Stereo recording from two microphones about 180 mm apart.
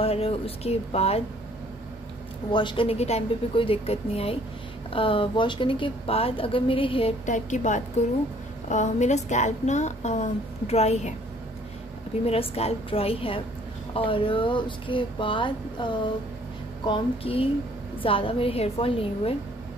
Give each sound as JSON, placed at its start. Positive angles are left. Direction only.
{"t": 0.0, "sound": "a woman's voice", "side_deg": 35}
{"t": 2.5, "sound": "a woman's voice", "side_deg": 25}
{"t": 12.3, "sound": "a woman's voice", "side_deg": 35}